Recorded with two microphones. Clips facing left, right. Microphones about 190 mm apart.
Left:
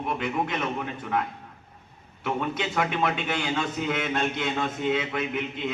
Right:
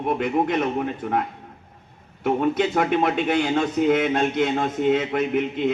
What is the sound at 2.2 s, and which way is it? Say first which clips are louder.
A man's voice: right 8 dB; 45° right (ahead or behind).